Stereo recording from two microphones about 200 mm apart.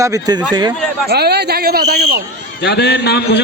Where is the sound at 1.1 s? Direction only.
55° right (ahead or behind).